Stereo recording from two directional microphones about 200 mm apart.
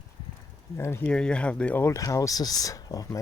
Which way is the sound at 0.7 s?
10° left (ahead or behind).